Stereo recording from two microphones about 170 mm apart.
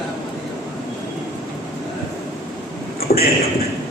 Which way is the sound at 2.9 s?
65° left (ahead or behind).